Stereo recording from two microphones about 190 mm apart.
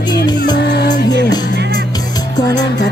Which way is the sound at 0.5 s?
65° left (ahead or behind).